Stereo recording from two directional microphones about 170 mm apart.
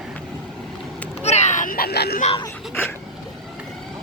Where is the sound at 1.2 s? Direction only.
40° left (ahead or behind); by 2.2 s 70° left (ahead or behind).